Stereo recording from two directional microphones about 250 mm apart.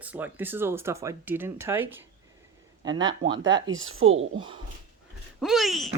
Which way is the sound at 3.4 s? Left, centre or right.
Right.